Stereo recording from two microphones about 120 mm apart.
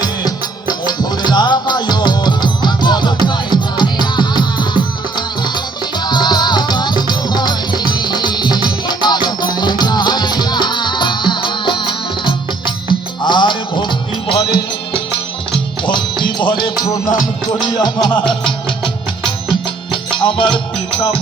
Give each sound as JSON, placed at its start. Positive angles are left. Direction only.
{"t": 0.0, "sound": "music", "side_deg": 35}
{"t": 15.5, "sound": "music", "side_deg": 40}